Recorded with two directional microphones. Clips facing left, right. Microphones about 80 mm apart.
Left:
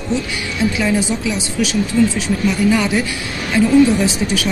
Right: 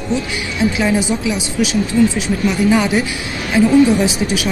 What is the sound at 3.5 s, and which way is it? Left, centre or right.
Speech, centre.